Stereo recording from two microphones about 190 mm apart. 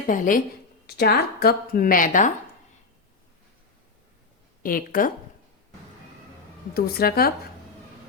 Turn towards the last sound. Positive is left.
turn(degrees=55)  # may be behind; listen again after turning